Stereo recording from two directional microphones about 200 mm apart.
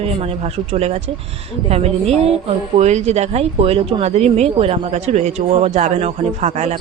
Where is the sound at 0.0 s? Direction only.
30° right (ahead or behind).